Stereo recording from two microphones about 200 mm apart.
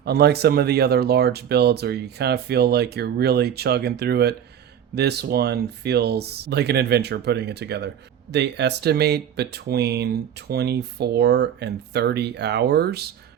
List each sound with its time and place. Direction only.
0.0 s speech: 55° right (ahead or behind)